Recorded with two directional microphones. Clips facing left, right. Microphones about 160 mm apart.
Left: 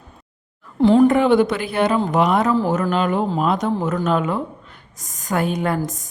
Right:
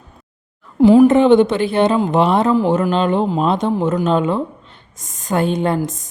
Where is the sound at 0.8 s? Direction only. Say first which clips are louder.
Right 4 dB; 10° right (ahead or behind).